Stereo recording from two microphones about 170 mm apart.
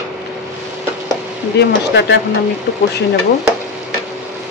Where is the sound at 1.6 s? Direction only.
90° left.